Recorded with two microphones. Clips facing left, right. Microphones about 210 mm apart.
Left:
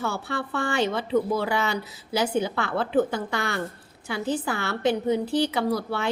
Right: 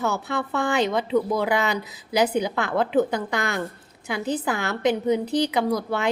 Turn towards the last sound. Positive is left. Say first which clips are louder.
# right 2 dB
turn(degrees=-20)  # may be behind; listen again after turning